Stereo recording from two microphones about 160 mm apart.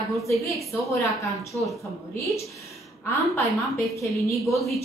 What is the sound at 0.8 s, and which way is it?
A woman's voice, 20° left (ahead or behind).